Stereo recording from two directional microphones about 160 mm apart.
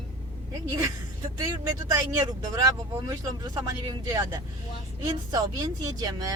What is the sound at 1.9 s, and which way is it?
Speech, 25° right (ahead or behind).